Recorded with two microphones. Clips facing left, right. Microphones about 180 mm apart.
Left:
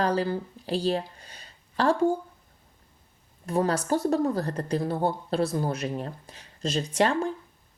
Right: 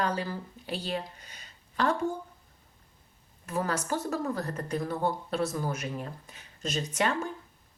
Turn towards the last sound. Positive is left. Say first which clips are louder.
# left 5 dB
turn(degrees=30)  # may be behind; listen again after turning